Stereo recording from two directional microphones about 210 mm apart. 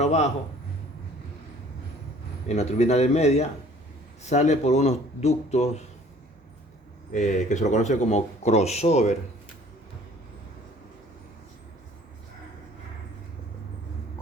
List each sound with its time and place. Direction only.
0.0 s speech: 30° left (ahead or behind)
2.5 s speech: 30° left (ahead or behind)
7.1 s speech: 35° left (ahead or behind)